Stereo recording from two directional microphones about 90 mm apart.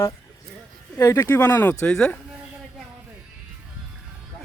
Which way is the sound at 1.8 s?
10° left (ahead or behind).